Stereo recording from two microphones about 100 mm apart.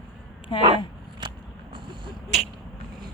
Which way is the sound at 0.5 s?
50° left (ahead or behind).